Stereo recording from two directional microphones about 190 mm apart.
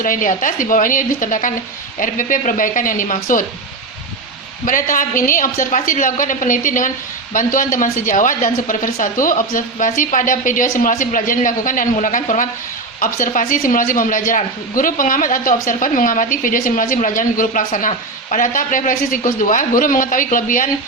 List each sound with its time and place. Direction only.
0.0 s speech: 45° left (ahead or behind)
4.6 s speech: 45° left (ahead or behind)